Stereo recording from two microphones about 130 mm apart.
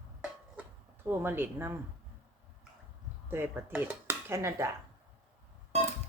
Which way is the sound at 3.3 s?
15° right (ahead or behind).